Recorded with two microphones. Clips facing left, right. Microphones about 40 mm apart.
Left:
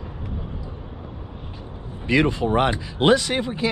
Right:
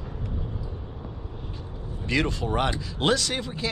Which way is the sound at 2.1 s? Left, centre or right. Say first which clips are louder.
Left 6 dB; left.